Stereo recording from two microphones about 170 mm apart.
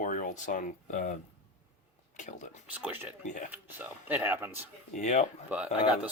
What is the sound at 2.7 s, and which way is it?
Speech, 10° right (ahead or behind).